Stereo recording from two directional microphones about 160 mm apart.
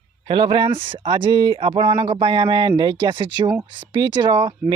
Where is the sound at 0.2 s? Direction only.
30° right (ahead or behind).